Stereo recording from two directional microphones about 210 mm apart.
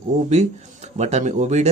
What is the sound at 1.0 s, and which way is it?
Speech, 35° right (ahead or behind).